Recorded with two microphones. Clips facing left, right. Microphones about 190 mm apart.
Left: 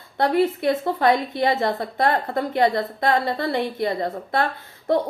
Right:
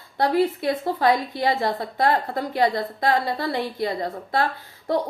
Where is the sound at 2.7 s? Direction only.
50° left (ahead or behind).